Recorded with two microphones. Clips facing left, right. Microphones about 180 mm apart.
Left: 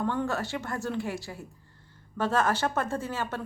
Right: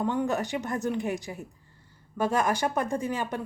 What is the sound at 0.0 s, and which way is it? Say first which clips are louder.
A woman's voice: right 2 dB; 15° right (ahead or behind).